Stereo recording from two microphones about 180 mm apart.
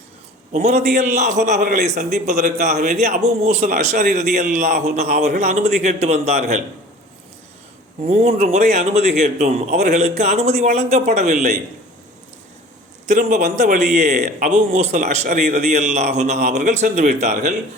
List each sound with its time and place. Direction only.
0.5 s a man's voice: 40° right (ahead or behind)
8.0 s a man's voice: 35° right (ahead or behind)
13.1 s a man's voice: 40° right (ahead or behind)